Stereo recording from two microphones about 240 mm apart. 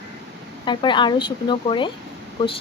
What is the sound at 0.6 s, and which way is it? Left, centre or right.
A woman's voice, centre.